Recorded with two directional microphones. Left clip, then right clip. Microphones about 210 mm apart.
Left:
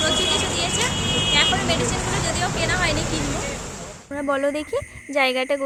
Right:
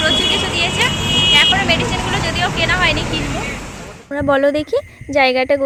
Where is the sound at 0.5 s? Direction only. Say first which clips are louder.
Right 7 dB; 20° left (ahead or behind).